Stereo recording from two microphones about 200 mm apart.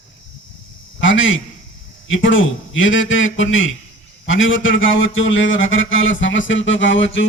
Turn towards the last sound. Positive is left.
turn(degrees=65)  # may be behind; listen again after turning